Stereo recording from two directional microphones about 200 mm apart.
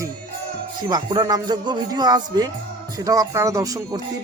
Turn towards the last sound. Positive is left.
turn(degrees=-15)  # may be behind; listen again after turning